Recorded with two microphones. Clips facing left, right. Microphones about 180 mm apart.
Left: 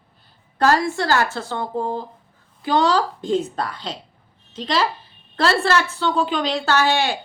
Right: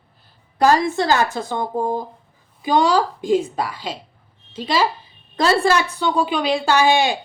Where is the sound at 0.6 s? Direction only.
15° right (ahead or behind).